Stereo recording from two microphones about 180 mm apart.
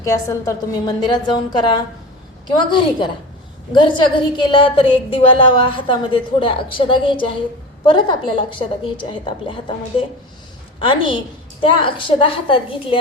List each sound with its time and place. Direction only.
0.0 s a woman's voice: 20° left (ahead or behind)